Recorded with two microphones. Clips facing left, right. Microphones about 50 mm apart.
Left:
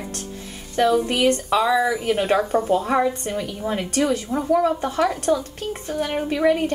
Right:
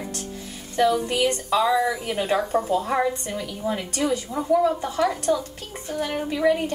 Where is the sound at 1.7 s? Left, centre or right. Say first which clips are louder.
Left 3 dB; centre.